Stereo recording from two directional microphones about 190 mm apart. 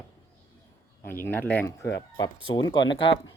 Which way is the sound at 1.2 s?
10° left (ahead or behind).